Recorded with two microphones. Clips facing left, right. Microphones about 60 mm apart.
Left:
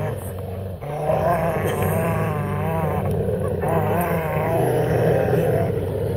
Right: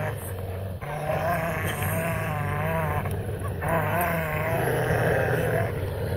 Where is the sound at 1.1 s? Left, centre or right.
Centre.